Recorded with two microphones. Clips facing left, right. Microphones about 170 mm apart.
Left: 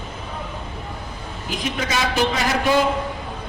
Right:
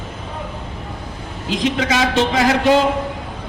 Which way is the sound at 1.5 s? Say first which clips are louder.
Right 7 dB; 90° right.